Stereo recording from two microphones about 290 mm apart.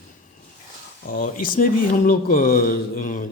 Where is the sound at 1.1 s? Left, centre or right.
Left.